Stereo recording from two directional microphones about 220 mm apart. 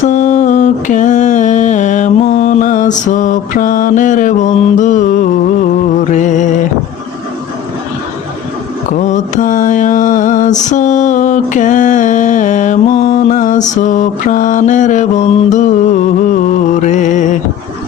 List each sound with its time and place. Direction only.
0.0 s mantra: 35° left (ahead or behind)
6.1 s music: 35° left (ahead or behind)
8.9 s mantra: 35° left (ahead or behind)
16.8 s music: 35° left (ahead or behind)